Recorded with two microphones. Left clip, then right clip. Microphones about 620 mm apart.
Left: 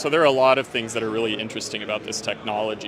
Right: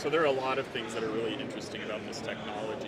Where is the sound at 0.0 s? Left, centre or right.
Left.